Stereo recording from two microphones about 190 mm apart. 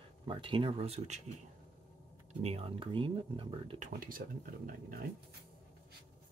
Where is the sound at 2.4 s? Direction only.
30° right (ahead or behind).